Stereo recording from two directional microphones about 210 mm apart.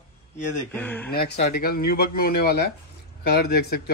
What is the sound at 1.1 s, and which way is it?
Speech, 50° left (ahead or behind).